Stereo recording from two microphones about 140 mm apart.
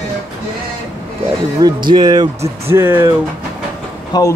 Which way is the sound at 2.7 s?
15° right (ahead or behind).